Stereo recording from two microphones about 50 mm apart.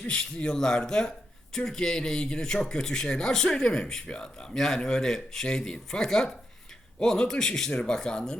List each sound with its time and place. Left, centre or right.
0.0 s speech: centre